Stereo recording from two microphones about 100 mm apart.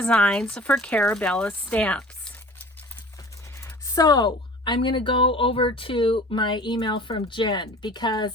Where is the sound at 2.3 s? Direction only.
20° left (ahead or behind).